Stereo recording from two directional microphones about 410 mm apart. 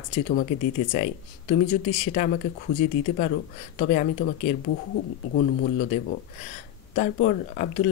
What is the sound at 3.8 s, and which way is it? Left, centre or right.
Speech, centre.